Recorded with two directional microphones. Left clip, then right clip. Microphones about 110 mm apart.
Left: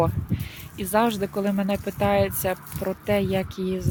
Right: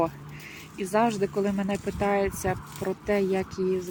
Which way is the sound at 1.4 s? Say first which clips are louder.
Left 2 dB; 70° left (ahead or behind).